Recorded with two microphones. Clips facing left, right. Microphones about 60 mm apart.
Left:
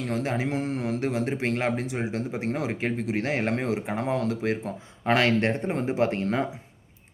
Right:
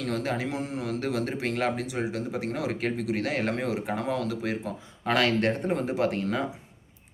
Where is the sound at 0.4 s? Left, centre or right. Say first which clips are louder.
Left 3 dB; left.